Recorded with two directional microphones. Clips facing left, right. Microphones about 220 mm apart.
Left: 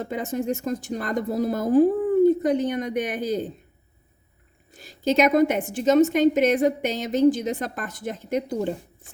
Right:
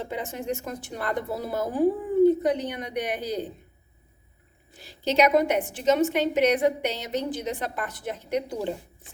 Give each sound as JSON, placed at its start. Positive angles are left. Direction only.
{"t": 0.0, "sound": "a woman's voice", "side_deg": 45}
{"t": 4.8, "sound": "a woman's voice", "side_deg": 45}